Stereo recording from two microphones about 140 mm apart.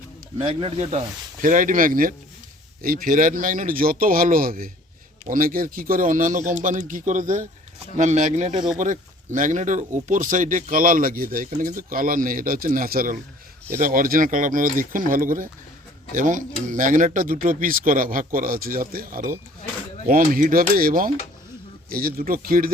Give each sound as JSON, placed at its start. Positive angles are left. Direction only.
{"t": 0.3, "sound": "a man's voice", "side_deg": -45}
{"t": 5.2, "sound": "a man's voice", "side_deg": -80}